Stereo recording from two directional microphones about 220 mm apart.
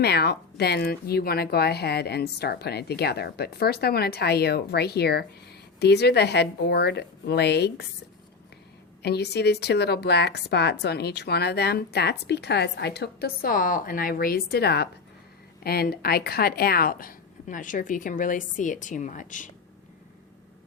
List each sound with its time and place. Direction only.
0.0 s speech: 45° left (ahead or behind)
9.0 s speech: 50° left (ahead or behind)